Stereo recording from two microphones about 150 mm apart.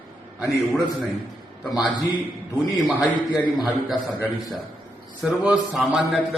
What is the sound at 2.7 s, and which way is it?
Speech, 5° right (ahead or behind).